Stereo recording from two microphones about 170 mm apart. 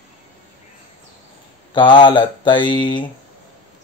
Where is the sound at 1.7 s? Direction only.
30° left (ahead or behind).